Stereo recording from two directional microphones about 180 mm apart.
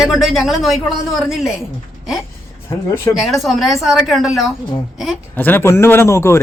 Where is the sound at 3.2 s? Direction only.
Centre (ahead or behind).